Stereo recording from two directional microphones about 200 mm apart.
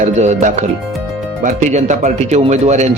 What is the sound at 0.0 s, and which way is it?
Speech, 35° right (ahead or behind).